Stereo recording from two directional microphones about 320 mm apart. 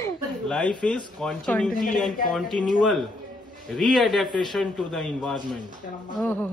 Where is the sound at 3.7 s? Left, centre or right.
Centre.